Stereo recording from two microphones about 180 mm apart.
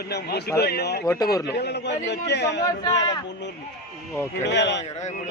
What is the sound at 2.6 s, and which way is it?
Speech, 20° left (ahead or behind).